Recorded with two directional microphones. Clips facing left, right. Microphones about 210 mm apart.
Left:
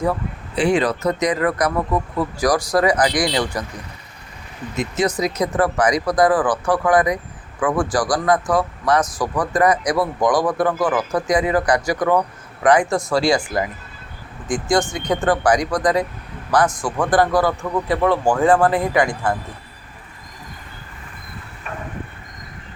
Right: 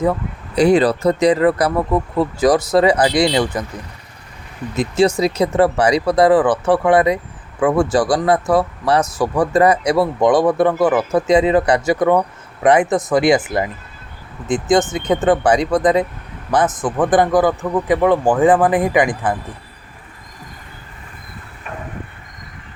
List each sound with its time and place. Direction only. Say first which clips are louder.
0.5 s speech: right 5 dB; 40° right (ahead or behind); by 3.7 s 20° right (ahead or behind)
4.8 s a man's voice: right 5 dB; 30° right (ahead or behind)